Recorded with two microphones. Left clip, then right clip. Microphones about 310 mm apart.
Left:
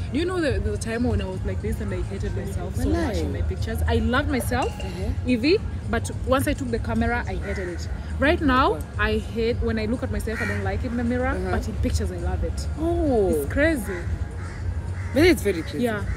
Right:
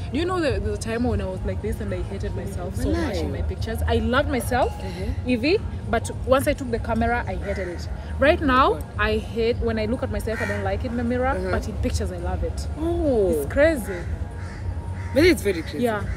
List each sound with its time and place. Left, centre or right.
0.1 s speech: centre
10.3 s speech: right
10.6 s speech: centre
15.1 s speech: centre